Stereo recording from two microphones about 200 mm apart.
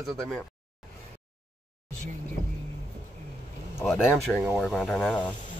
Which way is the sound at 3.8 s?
5° left (ahead or behind).